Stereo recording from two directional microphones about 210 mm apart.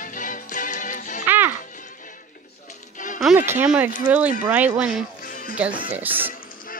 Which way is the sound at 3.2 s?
5° right (ahead or behind).